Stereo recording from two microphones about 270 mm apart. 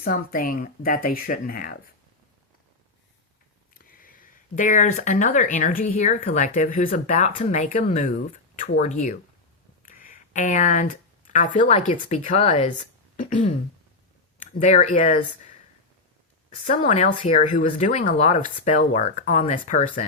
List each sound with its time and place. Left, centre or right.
0.0 s speech: left
3.8 s speech: left
14.6 s speech: left
16.6 s speech: left